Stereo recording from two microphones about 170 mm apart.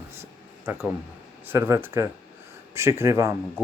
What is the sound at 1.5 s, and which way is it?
Speech, 15° right (ahead or behind).